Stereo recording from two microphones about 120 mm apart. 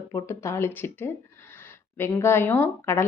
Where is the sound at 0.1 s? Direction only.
25° left (ahead or behind).